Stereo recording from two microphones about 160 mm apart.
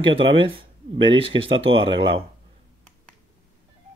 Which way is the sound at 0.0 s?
35° right (ahead or behind).